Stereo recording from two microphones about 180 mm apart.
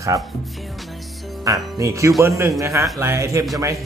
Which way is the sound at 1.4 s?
20° right (ahead or behind).